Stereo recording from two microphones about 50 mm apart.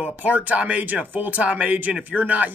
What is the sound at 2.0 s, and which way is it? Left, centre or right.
Speech, right.